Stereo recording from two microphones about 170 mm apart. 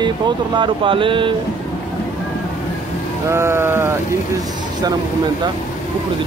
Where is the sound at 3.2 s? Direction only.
15° right (ahead or behind).